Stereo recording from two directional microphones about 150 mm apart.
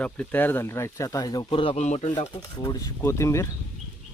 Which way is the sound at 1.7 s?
50° left (ahead or behind).